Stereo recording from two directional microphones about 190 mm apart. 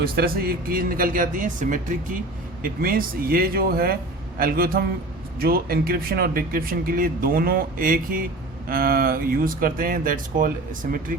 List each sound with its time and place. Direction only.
0.2 s speech: 55° right (ahead or behind)